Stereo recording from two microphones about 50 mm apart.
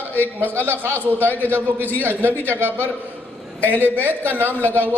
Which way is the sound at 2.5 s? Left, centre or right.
Right.